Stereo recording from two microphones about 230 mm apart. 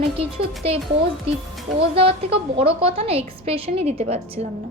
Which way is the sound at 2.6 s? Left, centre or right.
Right.